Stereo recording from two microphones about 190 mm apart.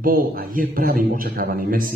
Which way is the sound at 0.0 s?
50° right (ahead or behind).